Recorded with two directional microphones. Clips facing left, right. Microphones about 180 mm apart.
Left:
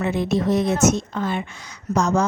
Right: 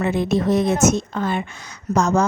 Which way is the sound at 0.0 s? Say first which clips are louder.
Right 2 dB; 50° right (ahead or behind).